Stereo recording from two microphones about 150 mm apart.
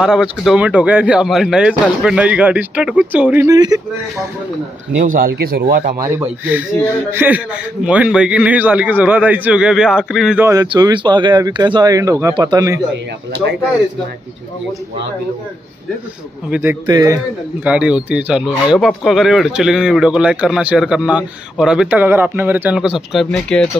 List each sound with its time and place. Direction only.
0.0 s speech: 5° right (ahead or behind)
3.4 s speech: 25° right (ahead or behind)
5.0 s speech: 70° right (ahead or behind)
7.1 s speech: 10° right (ahead or behind)
10.4 s speech: 25° right (ahead or behind)
16.4 s speech: 10° right (ahead or behind)
16.8 s speech: 25° right (ahead or behind)
17.6 s speech: 10° right (ahead or behind)